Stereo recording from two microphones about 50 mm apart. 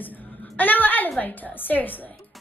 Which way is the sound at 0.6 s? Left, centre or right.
Left.